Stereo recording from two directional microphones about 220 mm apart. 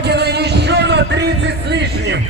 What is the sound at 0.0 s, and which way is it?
Music, 50° right (ahead or behind).